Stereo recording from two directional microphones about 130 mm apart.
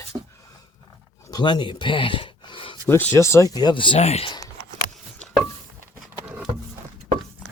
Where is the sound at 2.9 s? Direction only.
20° left (ahead or behind); by 4.3 s 50° left (ahead or behind).